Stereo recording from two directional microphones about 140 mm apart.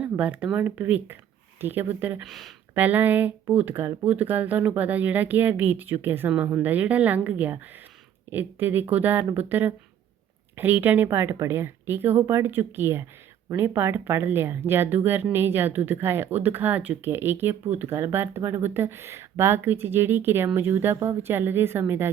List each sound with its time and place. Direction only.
0.0 s speech: 10° right (ahead or behind)
2.2 s speech: centre (ahead or behind)
2.7 s speech: 15° right (ahead or behind)